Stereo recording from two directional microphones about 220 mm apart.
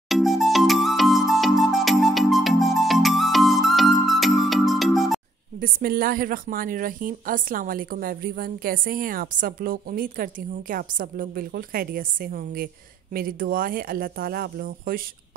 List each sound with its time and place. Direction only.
0.1 s music: centre (ahead or behind)
5.6 s speech: 40° right (ahead or behind)